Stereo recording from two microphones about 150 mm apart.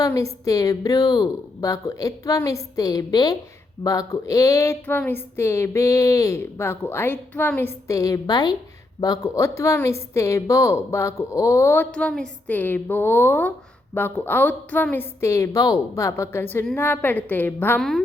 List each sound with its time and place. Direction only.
0.0 s a woman's voice: 20° left (ahead or behind)
11.9 s a woman's voice: 5° left (ahead or behind)
17.7 s a woman's voice: centre (ahead or behind)